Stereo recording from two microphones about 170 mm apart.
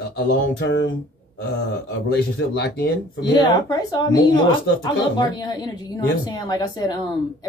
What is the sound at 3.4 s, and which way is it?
Speech, 20° left (ahead or behind).